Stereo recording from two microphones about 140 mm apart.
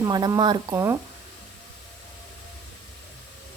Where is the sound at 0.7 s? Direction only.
20° right (ahead or behind).